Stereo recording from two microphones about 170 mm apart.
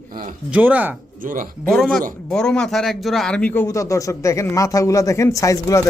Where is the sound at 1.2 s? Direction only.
55° right (ahead or behind).